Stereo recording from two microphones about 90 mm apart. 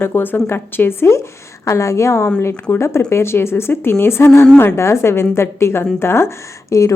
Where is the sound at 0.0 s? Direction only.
25° left (ahead or behind).